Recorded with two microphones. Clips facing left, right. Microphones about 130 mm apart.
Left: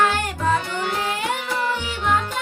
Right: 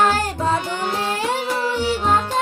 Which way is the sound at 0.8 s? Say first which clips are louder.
Right 2 dB; 30° right (ahead or behind).